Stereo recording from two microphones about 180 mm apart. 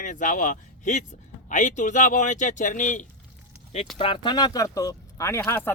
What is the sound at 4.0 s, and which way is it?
Speech, 30° left (ahead or behind).